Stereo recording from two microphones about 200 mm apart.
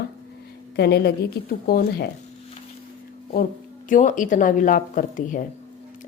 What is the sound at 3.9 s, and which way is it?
A woman's voice, 40° left (ahead or behind).